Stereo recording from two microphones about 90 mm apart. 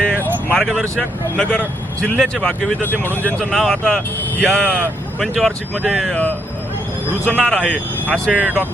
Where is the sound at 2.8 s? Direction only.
20° left (ahead or behind).